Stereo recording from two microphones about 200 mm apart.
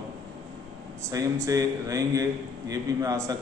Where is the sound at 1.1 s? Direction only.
15° right (ahead or behind).